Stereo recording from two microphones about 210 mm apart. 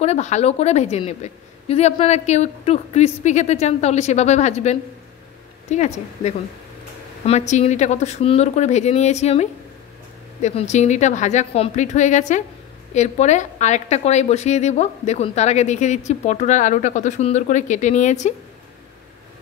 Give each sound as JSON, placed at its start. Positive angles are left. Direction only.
{"t": 0.0, "sound": "a woman's voice", "side_deg": 30}